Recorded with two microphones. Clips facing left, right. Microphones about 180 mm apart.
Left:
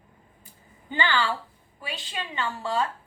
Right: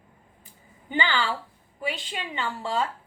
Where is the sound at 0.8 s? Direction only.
20° right (ahead or behind).